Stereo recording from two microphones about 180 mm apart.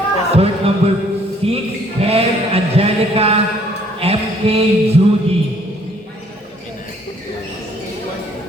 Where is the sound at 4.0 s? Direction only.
35° right (ahead or behind).